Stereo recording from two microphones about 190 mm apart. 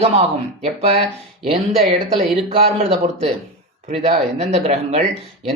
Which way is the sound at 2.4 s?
30° right (ahead or behind).